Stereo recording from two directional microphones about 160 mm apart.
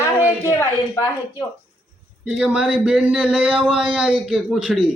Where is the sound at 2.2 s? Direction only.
5° right (ahead or behind).